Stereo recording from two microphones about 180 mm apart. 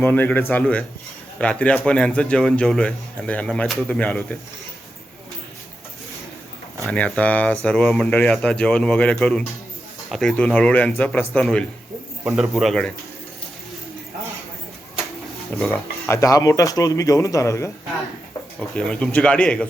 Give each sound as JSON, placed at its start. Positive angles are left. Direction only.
{"t": 0.0, "sound": "a man's voice", "side_deg": 10}
{"t": 6.8, "sound": "a man's voice", "side_deg": 5}
{"t": 15.5, "sound": "a man's voice", "side_deg": 0}
{"t": 16.0, "sound": "speech", "side_deg": 15}
{"t": 18.8, "sound": "a man's voice", "side_deg": 5}